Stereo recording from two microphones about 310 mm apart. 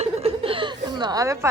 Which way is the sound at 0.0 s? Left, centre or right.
Centre.